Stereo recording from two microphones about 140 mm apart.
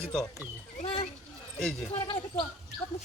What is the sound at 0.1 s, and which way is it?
Speech, 5° left (ahead or behind).